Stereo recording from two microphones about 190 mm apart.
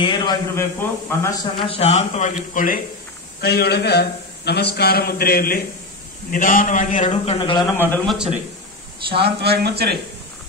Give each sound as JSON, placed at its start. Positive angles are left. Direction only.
{"t": 0.0, "sound": "a man's voice", "side_deg": 25}
{"t": 1.7, "sound": "a man's voice", "side_deg": 35}
{"t": 3.3, "sound": "a man's voice", "side_deg": 60}
{"t": 7.8, "sound": "a man's voice", "side_deg": 10}
{"t": 9.1, "sound": "speech", "side_deg": -60}